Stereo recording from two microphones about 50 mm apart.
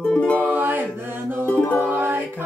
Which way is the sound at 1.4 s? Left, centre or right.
Left.